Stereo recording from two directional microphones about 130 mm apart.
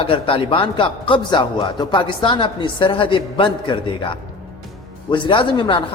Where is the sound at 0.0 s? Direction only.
45° left (ahead or behind).